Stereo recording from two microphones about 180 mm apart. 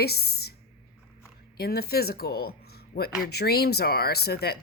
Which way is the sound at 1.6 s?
60° left (ahead or behind).